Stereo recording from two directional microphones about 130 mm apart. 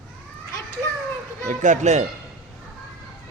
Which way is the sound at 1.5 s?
70° right (ahead or behind).